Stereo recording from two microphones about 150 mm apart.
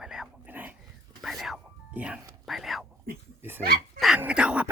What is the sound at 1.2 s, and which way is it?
Music, centre (ahead or behind).